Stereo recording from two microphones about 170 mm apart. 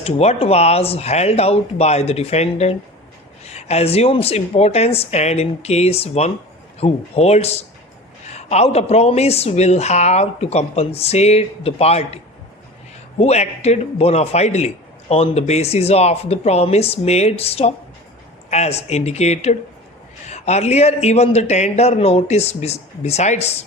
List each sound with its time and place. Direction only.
0.0 s a woman's voice: 35° left (ahead or behind)